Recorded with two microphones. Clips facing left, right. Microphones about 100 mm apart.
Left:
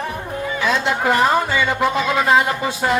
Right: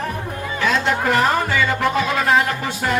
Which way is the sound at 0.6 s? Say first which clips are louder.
Even; 20° left (ahead or behind).